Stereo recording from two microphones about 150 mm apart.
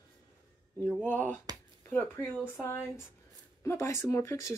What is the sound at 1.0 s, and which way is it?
Speech, 10° left (ahead or behind).